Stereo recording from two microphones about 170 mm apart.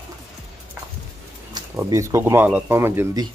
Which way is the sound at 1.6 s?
20° right (ahead or behind).